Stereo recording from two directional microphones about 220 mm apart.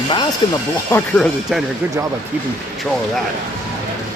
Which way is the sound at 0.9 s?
5° left (ahead or behind).